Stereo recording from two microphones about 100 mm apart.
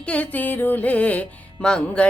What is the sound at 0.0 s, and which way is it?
Music, 15° left (ahead or behind).